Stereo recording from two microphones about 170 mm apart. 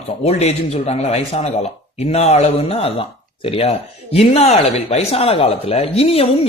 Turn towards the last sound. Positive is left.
turn(degrees=35)  # may be behind; listen again after turning